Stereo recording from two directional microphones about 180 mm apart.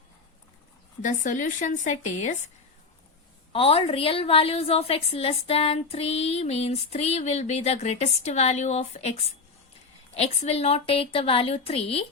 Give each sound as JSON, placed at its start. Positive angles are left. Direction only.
{"t": 1.0, "sound": "speech", "side_deg": 45}
{"t": 3.5, "sound": "a woman's voice", "side_deg": 30}
{"t": 10.2, "sound": "a woman's voice", "side_deg": 35}